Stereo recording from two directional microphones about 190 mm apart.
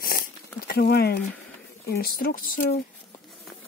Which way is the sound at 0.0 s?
50° left (ahead or behind).